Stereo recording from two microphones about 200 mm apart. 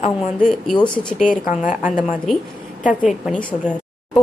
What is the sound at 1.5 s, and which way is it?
A woman's voice, 5° right (ahead or behind).